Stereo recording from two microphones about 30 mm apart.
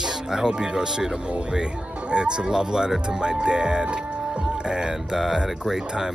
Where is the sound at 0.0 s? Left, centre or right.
Centre.